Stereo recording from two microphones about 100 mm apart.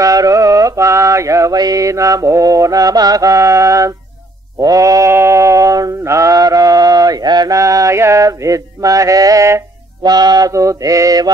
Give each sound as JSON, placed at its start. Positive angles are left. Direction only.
{"t": 0.0, "sound": "mantra", "side_deg": -35}
{"t": 4.6, "sound": "bleat", "side_deg": -35}
{"t": 10.0, "sound": "mantra", "side_deg": -40}